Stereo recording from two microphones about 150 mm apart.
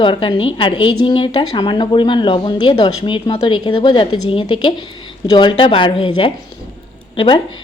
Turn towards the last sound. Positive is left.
turn(degrees=35)  # may be behind; listen again after turning